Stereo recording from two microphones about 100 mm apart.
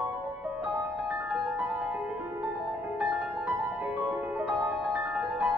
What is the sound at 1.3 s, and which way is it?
Music, 10° right (ahead or behind).